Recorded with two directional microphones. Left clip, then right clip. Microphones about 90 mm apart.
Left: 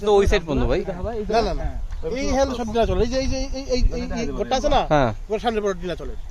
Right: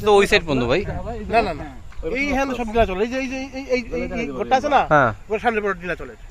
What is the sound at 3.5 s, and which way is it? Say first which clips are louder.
Speech: right 3 dB; 30° left (ahead or behind).